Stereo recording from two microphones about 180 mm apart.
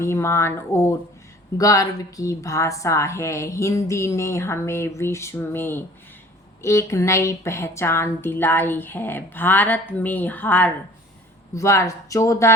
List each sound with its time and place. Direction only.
0.0 s a woman's voice: 15° left (ahead or behind)